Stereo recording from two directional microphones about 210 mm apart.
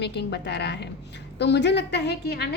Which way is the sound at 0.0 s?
55° left (ahead or behind).